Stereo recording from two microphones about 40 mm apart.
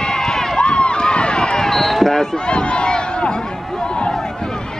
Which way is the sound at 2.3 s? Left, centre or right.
Left.